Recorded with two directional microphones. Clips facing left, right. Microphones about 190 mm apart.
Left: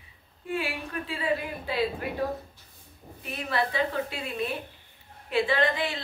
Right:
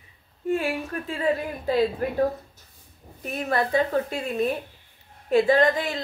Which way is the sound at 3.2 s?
45° right (ahead or behind).